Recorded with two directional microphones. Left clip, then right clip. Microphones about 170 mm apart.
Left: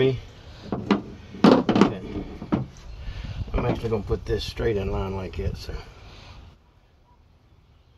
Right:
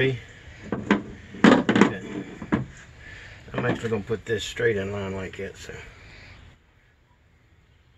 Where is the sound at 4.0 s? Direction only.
35° left (ahead or behind).